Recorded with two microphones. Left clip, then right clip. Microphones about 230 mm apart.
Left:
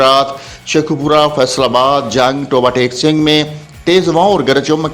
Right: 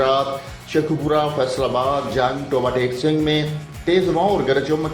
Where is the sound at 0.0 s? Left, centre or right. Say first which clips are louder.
Left 9 dB; left.